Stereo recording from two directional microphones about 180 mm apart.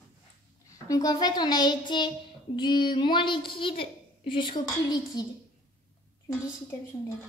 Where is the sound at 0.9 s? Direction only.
20° left (ahead or behind).